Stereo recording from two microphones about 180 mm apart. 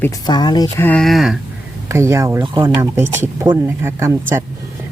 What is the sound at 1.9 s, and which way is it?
Speech, 15° right (ahead or behind).